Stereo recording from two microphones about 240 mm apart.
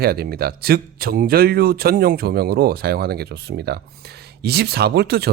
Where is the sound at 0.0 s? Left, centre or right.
Right.